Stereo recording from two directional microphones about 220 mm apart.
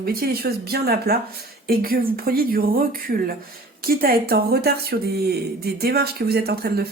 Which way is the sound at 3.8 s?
45° right (ahead or behind).